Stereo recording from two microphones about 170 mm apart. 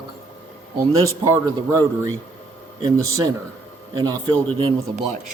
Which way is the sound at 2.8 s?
20° right (ahead or behind).